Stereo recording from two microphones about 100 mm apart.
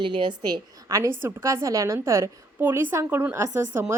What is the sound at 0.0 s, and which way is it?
Speech, 55° right (ahead or behind).